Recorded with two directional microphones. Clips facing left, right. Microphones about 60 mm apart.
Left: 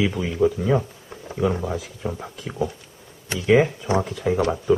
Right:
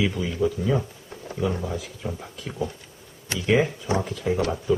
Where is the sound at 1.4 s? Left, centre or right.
Left.